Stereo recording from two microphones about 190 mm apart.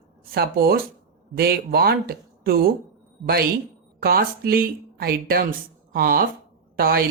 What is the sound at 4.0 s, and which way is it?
Speech, 55° right (ahead or behind).